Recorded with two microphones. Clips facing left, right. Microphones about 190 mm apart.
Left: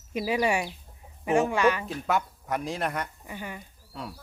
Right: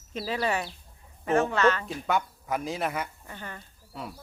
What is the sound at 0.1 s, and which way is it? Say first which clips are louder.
Speech: left 3 dB; 15° left (ahead or behind).